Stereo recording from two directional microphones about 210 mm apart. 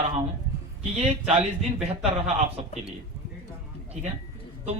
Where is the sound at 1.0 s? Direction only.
35° right (ahead or behind).